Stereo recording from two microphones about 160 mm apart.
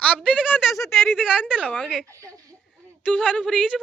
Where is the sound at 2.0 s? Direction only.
20° right (ahead or behind).